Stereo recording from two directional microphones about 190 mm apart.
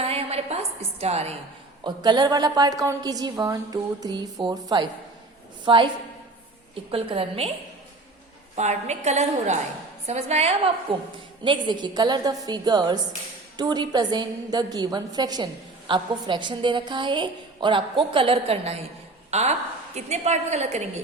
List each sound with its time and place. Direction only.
0.0 s a woman's voice: 30° right (ahead or behind)
1.8 s a woman's voice: 25° right (ahead or behind)
6.9 s a woman's voice: 30° right (ahead or behind)
8.5 s a woman's voice: 35° right (ahead or behind)